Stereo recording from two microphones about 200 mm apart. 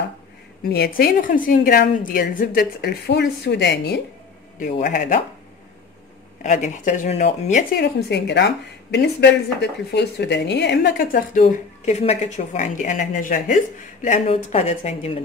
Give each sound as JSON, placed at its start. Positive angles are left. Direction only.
{"t": 0.7, "sound": "a woman's voice", "side_deg": 50}
{"t": 4.6, "sound": "speech", "side_deg": 40}
{"t": 6.4, "sound": "speech", "side_deg": 35}
{"t": 7.7, "sound": "a woman's voice", "side_deg": 60}